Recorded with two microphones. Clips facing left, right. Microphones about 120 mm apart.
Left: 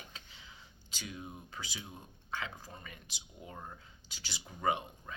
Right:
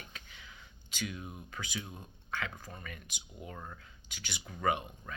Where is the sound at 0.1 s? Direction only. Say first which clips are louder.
Right 2 dB; 25° left (ahead or behind).